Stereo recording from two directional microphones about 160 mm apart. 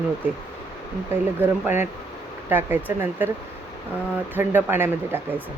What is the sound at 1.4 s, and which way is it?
Speech, 15° right (ahead or behind).